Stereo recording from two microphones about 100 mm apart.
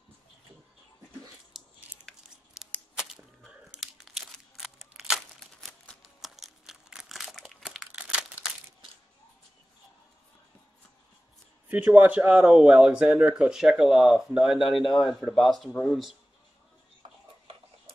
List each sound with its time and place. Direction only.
1.5 s a sound: centre (ahead or behind)
3.8 s crumpling: centre (ahead or behind)
11.7 s speech: 15° right (ahead or behind); by 16.2 s centre (ahead or behind)